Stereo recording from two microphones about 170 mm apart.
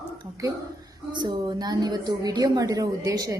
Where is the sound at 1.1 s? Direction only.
25° right (ahead or behind).